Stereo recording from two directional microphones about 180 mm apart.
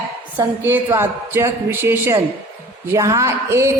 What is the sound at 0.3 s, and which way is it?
A woman's voice, 10° right (ahead or behind).